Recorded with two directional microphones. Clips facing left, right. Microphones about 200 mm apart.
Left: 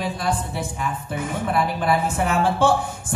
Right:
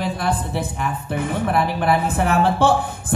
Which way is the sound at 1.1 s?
55° right (ahead or behind).